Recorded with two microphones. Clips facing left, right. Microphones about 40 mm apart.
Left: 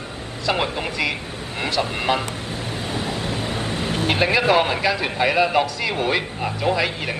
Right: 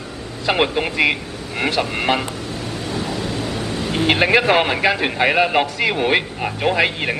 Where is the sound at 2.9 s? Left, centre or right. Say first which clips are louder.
Right 2 dB; left.